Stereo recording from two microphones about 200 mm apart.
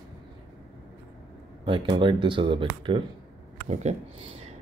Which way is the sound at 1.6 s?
25° right (ahead or behind).